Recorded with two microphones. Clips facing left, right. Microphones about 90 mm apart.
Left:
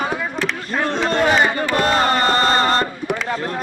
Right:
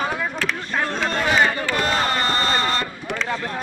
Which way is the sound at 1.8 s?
45° left (ahead or behind).